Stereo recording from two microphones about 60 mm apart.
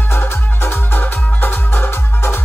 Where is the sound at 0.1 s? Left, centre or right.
Left.